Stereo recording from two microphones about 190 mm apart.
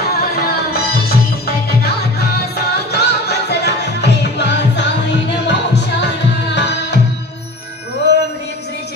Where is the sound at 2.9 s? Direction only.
60° left (ahead or behind).